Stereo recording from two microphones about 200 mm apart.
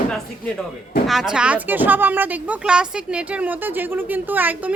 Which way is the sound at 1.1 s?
Centre (ahead or behind).